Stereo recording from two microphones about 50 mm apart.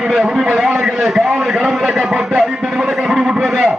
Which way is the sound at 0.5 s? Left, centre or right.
Centre.